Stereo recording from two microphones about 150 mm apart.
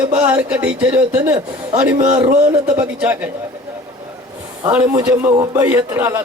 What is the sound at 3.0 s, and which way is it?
Speech, 10° right (ahead or behind).